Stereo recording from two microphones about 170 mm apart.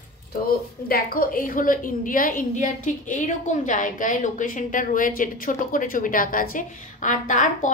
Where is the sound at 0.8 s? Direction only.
60° left (ahead or behind).